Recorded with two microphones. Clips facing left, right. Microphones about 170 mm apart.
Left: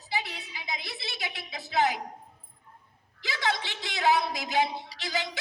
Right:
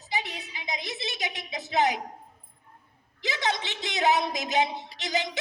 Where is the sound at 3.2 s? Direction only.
20° right (ahead or behind).